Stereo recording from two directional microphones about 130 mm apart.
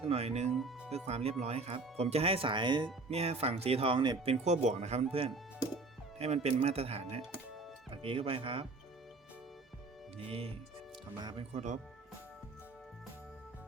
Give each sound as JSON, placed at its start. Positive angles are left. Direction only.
{"t": 0.0, "sound": "speech", "side_deg": -50}
{"t": 0.5, "sound": "speech", "side_deg": 0}
{"t": 0.9, "sound": "speech", "side_deg": -55}
{"t": 4.3, "sound": "speech", "side_deg": -60}
{"t": 6.1, "sound": "speech", "side_deg": -55}
{"t": 10.2, "sound": "speech", "side_deg": -45}
{"t": 11.2, "sound": "speech", "side_deg": -35}
{"t": 11.5, "sound": "speech", "side_deg": -65}